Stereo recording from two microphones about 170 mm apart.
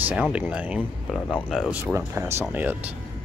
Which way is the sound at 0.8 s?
5° left (ahead or behind).